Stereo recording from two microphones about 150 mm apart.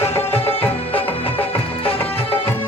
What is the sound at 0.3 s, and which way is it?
Music, 40° left (ahead or behind).